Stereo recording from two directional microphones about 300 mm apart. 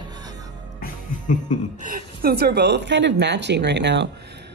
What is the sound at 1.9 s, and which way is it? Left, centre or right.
Speech, right.